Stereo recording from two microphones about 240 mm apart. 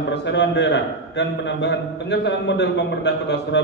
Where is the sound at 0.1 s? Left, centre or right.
Left.